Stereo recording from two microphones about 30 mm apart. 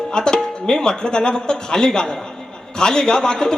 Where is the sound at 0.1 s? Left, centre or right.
Left.